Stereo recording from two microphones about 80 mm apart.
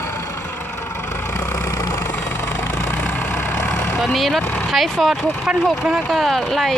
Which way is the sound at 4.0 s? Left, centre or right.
Centre.